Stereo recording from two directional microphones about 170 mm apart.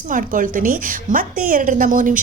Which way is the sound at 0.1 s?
55° right (ahead or behind).